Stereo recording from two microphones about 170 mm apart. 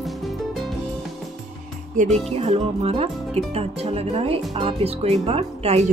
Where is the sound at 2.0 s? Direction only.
50° right (ahead or behind).